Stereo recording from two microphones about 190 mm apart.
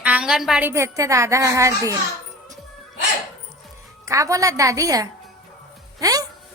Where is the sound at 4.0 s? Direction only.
15° right (ahead or behind).